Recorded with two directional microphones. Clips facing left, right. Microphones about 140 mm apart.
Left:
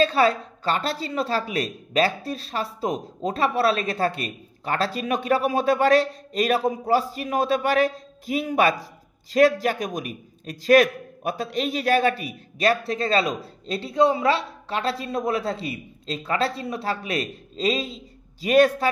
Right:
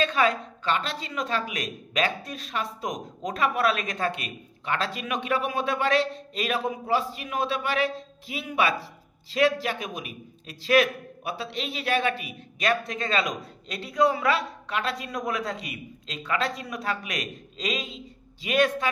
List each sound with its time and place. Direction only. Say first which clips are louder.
0.0 s a man's voice: left 4 dB; 35° left (ahead or behind)